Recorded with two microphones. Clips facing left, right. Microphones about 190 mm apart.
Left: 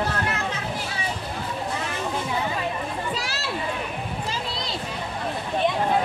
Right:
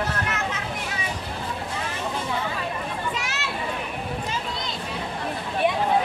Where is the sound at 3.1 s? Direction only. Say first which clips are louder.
Left 1 dB; 35° left (ahead or behind).